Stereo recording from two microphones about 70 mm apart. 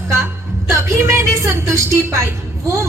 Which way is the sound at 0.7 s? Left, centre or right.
Right.